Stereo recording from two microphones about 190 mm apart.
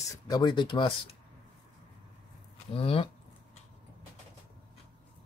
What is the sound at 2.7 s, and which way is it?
Speech, 30° left (ahead or behind).